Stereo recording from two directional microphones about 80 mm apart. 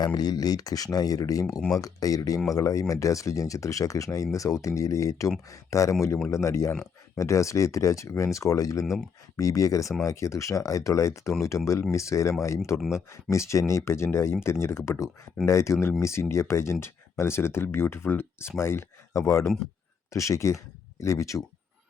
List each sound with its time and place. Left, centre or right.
0.0 s speech: left